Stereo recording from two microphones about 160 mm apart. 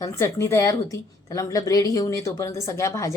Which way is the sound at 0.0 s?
15° left (ahead or behind).